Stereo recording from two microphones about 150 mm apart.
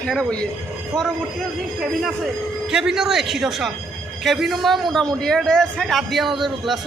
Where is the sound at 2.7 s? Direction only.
5° right (ahead or behind).